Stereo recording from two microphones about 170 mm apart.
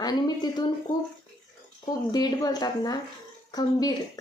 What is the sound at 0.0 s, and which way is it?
Speech, 25° left (ahead or behind).